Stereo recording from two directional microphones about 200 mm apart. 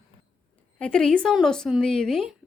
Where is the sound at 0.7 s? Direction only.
5° left (ahead or behind).